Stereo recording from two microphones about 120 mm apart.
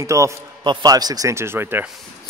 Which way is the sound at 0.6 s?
35° right (ahead or behind).